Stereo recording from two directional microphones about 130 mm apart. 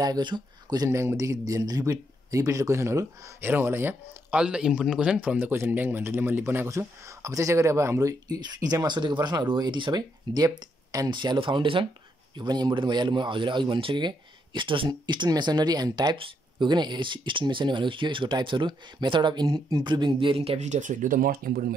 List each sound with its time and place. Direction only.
0.0 s speech: 35° right (ahead or behind)
20.5 s speech: 65° right (ahead or behind); by 21.3 s 90° right